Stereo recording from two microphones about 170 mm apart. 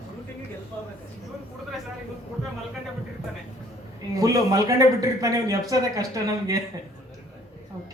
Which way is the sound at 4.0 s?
20° right (ahead or behind).